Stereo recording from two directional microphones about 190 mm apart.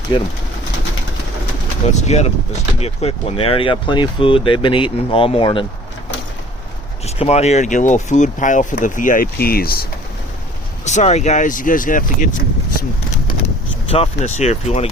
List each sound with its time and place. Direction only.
0.1 s speech: 25° left (ahead or behind)
1.9 s speech: 35° left (ahead or behind)
7.2 s speech: 35° left (ahead or behind); by 9.8 s 50° left (ahead or behind)
10.8 s speech: 35° left (ahead or behind)
13.8 s speech: 30° left (ahead or behind)